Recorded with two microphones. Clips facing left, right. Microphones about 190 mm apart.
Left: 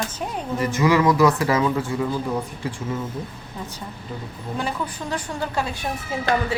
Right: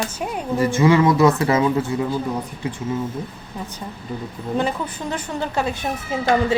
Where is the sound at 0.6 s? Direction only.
25° right (ahead or behind).